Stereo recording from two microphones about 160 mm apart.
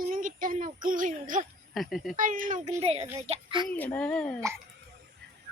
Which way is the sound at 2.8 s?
40° right (ahead or behind).